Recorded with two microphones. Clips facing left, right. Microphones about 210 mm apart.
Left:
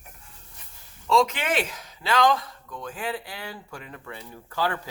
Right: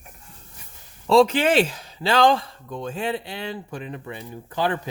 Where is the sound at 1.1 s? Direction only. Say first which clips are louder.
Right 6 dB; 35° right (ahead or behind).